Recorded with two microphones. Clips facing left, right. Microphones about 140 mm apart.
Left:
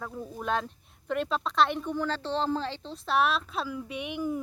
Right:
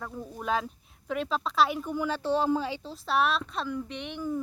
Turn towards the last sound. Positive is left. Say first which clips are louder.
# left 1 dB
turn(degrees=10)  # may be behind; listen again after turning